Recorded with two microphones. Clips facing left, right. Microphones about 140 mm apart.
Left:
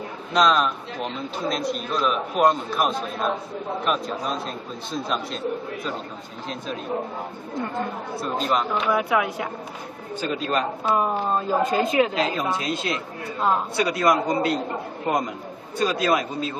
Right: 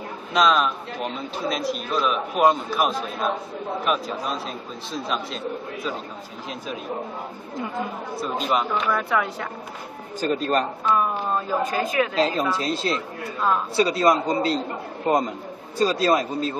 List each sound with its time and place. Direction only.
0.3 s a man's voice: centre (ahead or behind)
7.5 s a man's voice: 5° right (ahead or behind)
10.2 s a man's voice: 40° right (ahead or behind)
10.9 s a woman's voice: 30° left (ahead or behind)
12.2 s a man's voice: 35° right (ahead or behind)